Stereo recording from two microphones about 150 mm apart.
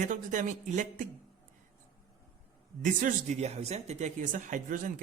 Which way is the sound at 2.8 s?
60° right (ahead or behind).